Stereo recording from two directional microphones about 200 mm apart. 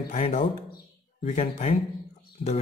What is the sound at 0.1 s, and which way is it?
Speech, 35° left (ahead or behind).